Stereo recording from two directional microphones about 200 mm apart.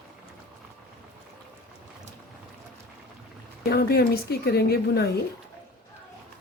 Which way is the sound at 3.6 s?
50° left (ahead or behind).